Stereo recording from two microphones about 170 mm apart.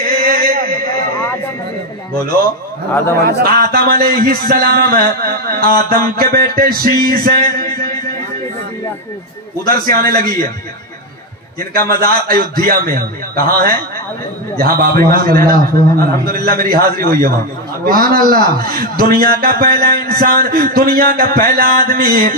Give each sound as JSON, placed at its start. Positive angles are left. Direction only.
{"t": 0.0, "sound": "a sound", "side_deg": -60}
{"t": 2.2, "sound": "speech", "side_deg": -60}
{"t": 9.6, "sound": "speech", "side_deg": -60}
{"t": 11.7, "sound": "speech", "side_deg": -60}